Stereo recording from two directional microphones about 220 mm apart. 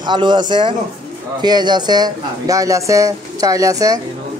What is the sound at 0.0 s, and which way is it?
Speech, 20° right (ahead or behind).